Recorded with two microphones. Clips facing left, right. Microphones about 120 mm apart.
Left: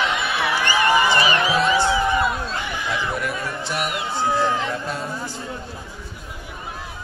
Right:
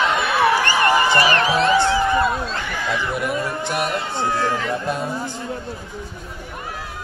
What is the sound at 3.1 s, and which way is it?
Music, 25° right (ahead or behind).